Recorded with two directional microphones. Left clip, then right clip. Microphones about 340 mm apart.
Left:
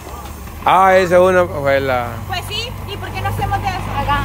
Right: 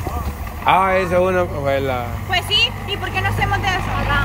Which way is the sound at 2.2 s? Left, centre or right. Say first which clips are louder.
Right 6 dB; centre.